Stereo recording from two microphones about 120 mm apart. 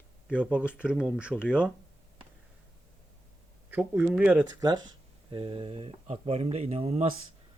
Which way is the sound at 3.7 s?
15° right (ahead or behind).